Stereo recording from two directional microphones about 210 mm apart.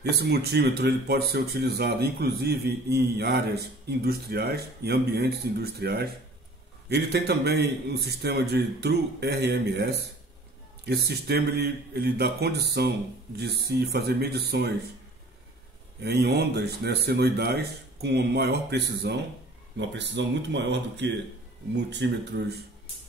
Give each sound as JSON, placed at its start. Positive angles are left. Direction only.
{"t": 0.0, "sound": "speech", "side_deg": -50}
{"t": 16.0, "sound": "speech", "side_deg": -50}